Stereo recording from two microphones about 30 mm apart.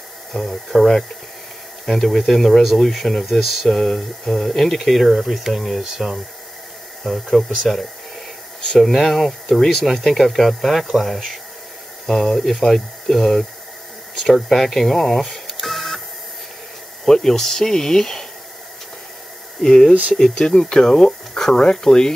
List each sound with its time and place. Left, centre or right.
0.3 s speech: centre
7.3 s speech: centre
12.1 s speech: centre
15.6 s printer: centre
17.0 s speech: centre
19.6 s speech: left